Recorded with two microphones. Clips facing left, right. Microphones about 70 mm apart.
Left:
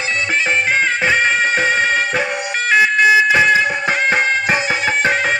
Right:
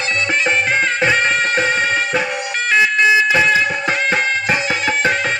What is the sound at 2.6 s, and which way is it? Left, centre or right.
Siren, left.